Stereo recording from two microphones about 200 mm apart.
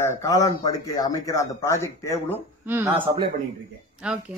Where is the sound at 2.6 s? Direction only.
10° right (ahead or behind).